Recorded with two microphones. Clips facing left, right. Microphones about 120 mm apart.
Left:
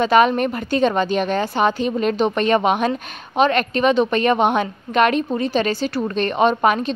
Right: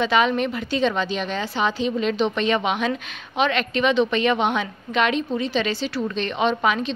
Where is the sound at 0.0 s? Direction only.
45° left (ahead or behind).